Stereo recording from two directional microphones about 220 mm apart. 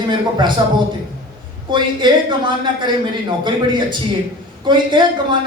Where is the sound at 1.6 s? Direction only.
20° right (ahead or behind).